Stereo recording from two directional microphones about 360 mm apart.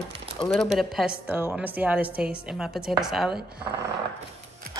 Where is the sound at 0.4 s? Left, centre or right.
Centre.